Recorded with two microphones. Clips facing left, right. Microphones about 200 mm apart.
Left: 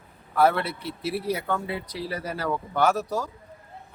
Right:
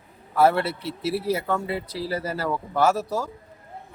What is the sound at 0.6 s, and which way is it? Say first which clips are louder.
Speech: right 3 dB; 30° right (ahead or behind).